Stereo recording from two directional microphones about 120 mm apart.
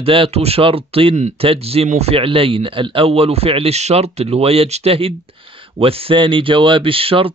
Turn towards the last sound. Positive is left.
turn(degrees=-50)  # may be behind; listen again after turning